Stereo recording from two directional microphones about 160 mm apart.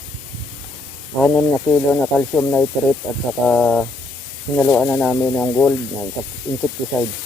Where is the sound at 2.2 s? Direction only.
10° left (ahead or behind).